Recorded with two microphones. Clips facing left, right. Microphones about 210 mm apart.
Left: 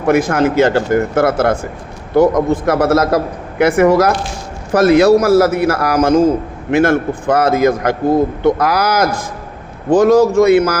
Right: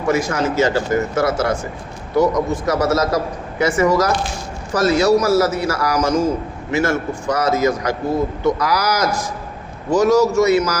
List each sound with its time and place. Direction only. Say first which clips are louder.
0.0 s a man's voice: left 6 dB; 55° left (ahead or behind)